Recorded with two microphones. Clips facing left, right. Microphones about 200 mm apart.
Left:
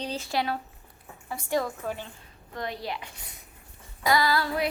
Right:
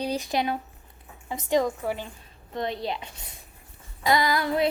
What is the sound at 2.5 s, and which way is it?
Female singing, 25° right (ahead or behind).